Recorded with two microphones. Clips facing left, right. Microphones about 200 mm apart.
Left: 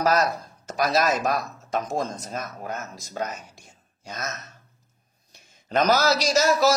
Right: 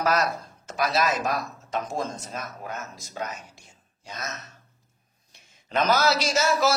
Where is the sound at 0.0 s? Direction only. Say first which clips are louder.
Left 2 dB; 40° left (ahead or behind).